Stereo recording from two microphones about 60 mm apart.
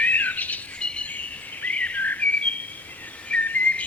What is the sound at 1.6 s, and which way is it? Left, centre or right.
Whistling, left.